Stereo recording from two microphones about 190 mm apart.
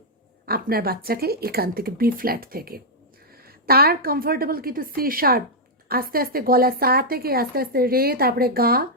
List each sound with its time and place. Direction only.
0.4 s speech: 55° right (ahead or behind)